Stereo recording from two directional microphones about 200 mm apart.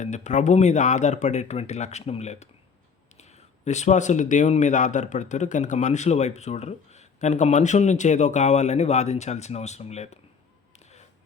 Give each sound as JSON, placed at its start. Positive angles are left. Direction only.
{"t": 0.0, "sound": "speech", "side_deg": 35}
{"t": 3.6, "sound": "speech", "side_deg": 35}